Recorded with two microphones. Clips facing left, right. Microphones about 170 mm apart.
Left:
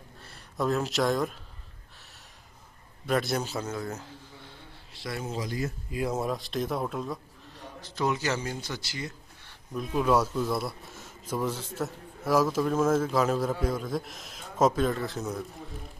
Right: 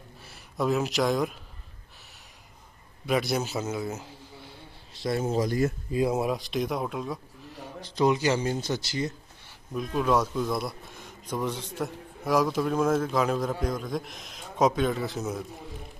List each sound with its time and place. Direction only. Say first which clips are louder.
0.2 s speech: right 1 dB; centre (ahead or behind)
3.1 s a man's voice: right 1 dB; 5° right (ahead or behind)
5.0 s speech: right 7 dB; 30° right (ahead or behind)
5.3 s speech: right 7 dB; 50° right (ahead or behind)
6.0 s a man's voice: right 1 dB; 10° right (ahead or behind)
7.9 s a man's voice: right 5 dB; 15° right (ahead or behind)
9.8 s speech: even; 5° left (ahead or behind)